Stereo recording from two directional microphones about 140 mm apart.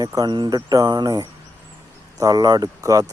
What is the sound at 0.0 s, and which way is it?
Speech, 25° right (ahead or behind).